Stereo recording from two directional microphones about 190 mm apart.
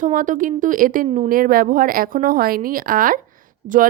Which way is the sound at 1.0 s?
30° right (ahead or behind).